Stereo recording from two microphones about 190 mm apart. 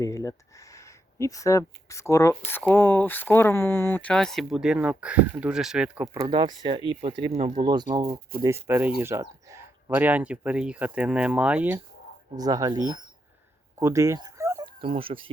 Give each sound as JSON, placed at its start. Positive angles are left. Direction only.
{"t": 0.0, "sound": "speech", "side_deg": 15}
{"t": 6.1, "sound": "speech", "side_deg": -20}
{"t": 8.0, "sound": "speech", "side_deg": -55}
{"t": 8.4, "sound": "speech", "side_deg": -15}
{"t": 12.4, "sound": "speech", "side_deg": -20}
{"t": 13.7, "sound": "dog", "side_deg": -15}
{"t": 14.8, "sound": "speech", "side_deg": -30}